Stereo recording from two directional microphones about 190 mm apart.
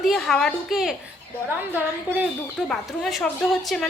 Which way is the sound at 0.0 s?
Centre (ahead or behind).